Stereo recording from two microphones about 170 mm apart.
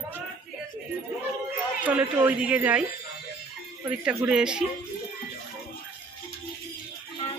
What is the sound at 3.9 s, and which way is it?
Speech, 5° right (ahead or behind).